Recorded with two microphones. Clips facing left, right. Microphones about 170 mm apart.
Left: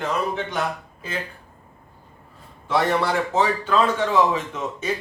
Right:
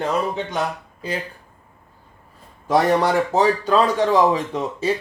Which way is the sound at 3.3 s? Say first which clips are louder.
Right 2 dB; 35° right (ahead or behind).